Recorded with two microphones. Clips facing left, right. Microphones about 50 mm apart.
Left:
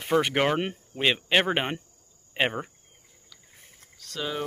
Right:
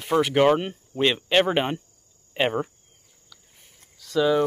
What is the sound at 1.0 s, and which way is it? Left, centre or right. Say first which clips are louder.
Speech: right 3 dB; centre.